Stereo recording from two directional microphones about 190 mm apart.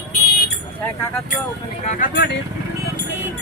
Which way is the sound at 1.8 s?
50° left (ahead or behind).